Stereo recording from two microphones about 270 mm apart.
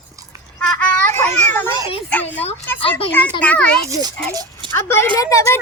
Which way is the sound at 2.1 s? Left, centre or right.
Centre.